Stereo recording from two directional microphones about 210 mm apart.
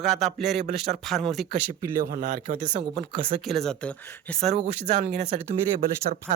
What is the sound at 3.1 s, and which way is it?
Speech, 25° right (ahead or behind).